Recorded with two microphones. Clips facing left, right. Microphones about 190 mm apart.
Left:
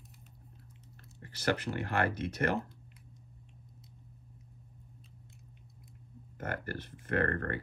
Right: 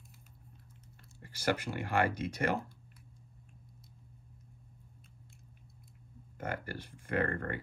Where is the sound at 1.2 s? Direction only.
10° right (ahead or behind).